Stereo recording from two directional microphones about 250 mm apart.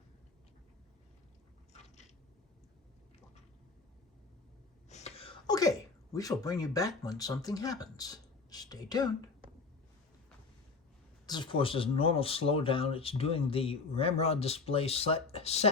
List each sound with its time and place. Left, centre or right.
4.9 s a sound: left
6.4 s speech: centre
11.3 s speech: centre